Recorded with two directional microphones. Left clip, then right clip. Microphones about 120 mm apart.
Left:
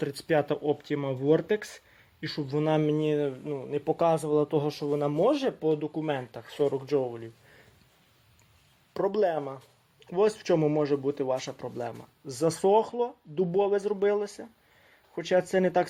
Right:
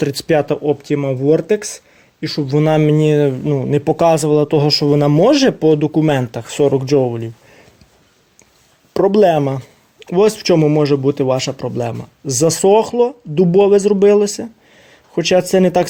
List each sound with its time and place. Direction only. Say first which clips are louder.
0.0 s speech: right 12 dB; 25° right (ahead or behind); by 1.8 s 10° right (ahead or behind)
2.4 s speech: right 12 dB; 35° right (ahead or behind)
8.9 s speech: right 15 dB; 30° right (ahead or behind)
10.1 s speech: right 12 dB; 20° right (ahead or behind)